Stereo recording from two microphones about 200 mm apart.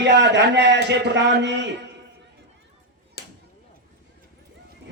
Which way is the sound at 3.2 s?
50° left (ahead or behind).